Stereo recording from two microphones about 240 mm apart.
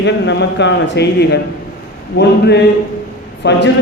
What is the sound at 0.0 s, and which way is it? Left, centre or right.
A man's voice, left.